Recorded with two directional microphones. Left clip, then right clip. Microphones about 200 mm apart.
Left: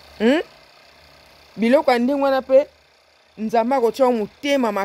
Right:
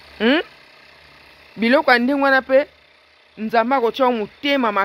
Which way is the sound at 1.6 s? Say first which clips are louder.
Right 1 dB; 10° left (ahead or behind).